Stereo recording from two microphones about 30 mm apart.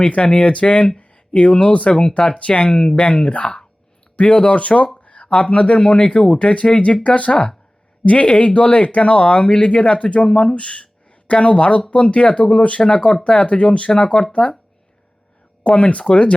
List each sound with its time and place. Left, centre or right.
0.4 s speech: left
0.9 s a sound: left
1.9 s speech: left
4.2 s speech: left
4.9 s a sound: left
5.3 s speech: left
10.2 s speech: left
10.5 s speech: left
12.8 s speech: left
13.2 s speech: left
15.6 s speech: left